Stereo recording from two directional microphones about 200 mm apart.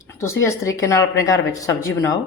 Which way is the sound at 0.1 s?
15° left (ahead or behind).